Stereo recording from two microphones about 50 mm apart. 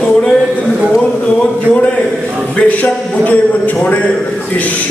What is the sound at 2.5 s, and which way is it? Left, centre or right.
A man's voice, left.